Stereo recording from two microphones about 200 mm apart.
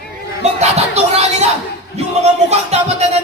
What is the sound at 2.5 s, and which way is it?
Speech, 30° right (ahead or behind).